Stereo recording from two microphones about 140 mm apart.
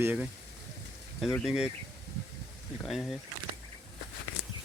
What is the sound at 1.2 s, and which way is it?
Speech, 5° left (ahead or behind).